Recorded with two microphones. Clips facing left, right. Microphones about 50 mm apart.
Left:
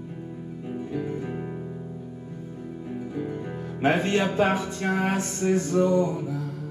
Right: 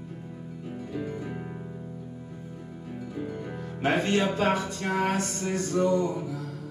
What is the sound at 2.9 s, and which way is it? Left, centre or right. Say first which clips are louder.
Music: left 3 dB; centre.